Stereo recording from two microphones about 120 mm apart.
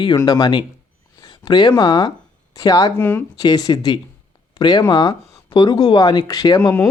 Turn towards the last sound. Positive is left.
turn(degrees=35)  # may be behind; listen again after turning